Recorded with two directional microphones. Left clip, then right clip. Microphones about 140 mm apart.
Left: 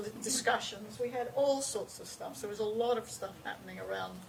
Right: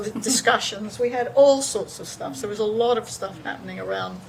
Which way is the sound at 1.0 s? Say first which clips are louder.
Right 15 dB; 40° right (ahead or behind).